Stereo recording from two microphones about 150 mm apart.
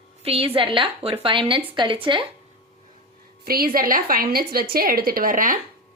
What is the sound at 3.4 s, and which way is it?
A woman's voice, 80° right.